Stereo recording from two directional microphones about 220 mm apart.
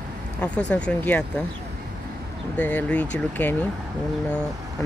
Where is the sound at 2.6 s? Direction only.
5° left (ahead or behind).